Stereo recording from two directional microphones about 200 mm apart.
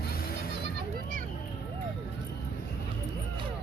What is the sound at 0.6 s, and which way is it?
Children playing, 50° right (ahead or behind).